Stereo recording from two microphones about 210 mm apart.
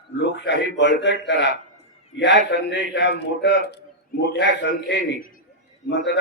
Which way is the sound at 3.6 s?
55° left (ahead or behind).